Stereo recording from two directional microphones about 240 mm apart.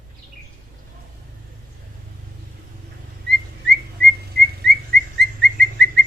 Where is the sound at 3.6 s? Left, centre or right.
Right.